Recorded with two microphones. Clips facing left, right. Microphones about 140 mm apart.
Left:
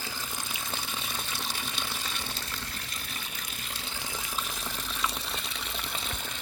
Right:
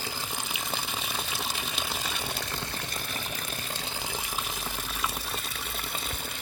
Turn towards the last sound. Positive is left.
turn(degrees=-5)  # may be behind; listen again after turning